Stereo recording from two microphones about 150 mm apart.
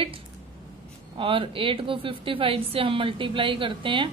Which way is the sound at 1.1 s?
35° right (ahead or behind).